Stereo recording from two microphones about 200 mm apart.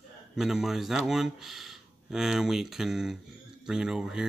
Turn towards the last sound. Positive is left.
turn(degrees=-5)  # may be behind; listen again after turning